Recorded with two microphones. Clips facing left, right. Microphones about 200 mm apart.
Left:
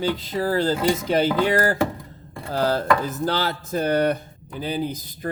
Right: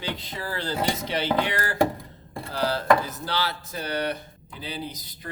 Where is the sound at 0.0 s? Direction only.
40° left (ahead or behind).